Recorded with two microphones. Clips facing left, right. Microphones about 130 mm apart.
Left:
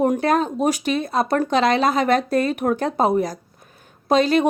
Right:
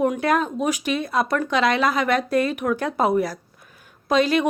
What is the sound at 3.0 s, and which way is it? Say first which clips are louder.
A woman's voice: left 1 dB; 25° left (ahead or behind).